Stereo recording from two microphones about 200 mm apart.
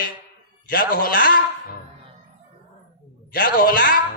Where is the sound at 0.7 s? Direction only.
45° left (ahead or behind).